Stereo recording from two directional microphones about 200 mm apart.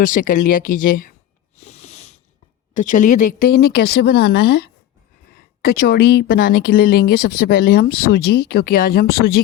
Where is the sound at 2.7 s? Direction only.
40° left (ahead or behind); by 4.7 s 60° left (ahead or behind).